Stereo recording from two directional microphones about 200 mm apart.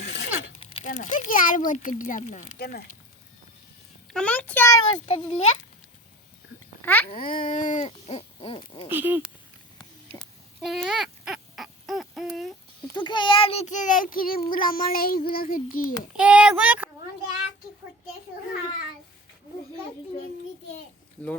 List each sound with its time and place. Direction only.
0.0 s a sound: 60° left (ahead or behind)
0.6 s a sound: 30° left (ahead or behind)
0.9 s speech: 40° left (ahead or behind)
2.6 s a child's voice: 50° left (ahead or behind)
4.1 s a child's voice: 5° left (ahead or behind)
5.0 s speech: 30° left (ahead or behind)
6.8 s a child's voice: 10° left (ahead or behind)
7.2 s speech: 45° left (ahead or behind); by 8.9 s 25° left (ahead or behind)
8.9 s speech: 10° right (ahead or behind)
10.6 s owl: centre (ahead or behind)
12.9 s a child's voice: 20° left (ahead or behind); by 16.0 s 45° left (ahead or behind)
16.1 s speech: 5° right (ahead or behind)